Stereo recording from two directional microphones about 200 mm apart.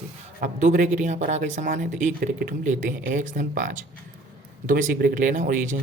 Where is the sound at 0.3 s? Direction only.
40° right (ahead or behind).